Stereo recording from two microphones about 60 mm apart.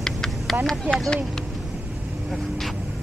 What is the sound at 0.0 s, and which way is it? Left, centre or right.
Vehicle, centre.